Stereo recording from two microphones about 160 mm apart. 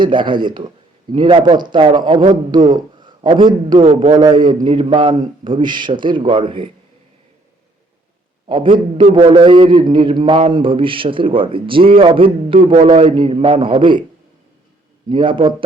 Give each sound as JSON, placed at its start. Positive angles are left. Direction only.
{"t": 0.0, "sound": "a man's voice", "side_deg": -30}
{"t": 8.6, "sound": "a man's voice", "side_deg": -50}
{"t": 9.1, "sound": "a man's voice", "side_deg": -35}
{"t": 15.1, "sound": "a man's voice", "side_deg": -30}